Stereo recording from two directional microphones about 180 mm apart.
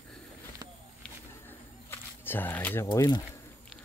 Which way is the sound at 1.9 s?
10° left (ahead or behind).